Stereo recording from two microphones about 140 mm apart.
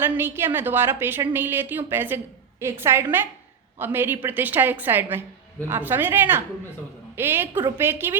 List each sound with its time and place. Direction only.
0.0 s a woman's voice: 15° right (ahead or behind)